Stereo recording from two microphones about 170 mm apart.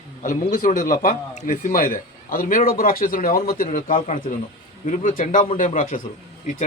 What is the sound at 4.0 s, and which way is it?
Speech, 45° left (ahead or behind).